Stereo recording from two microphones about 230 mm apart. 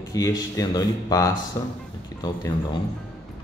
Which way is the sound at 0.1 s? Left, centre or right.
Centre.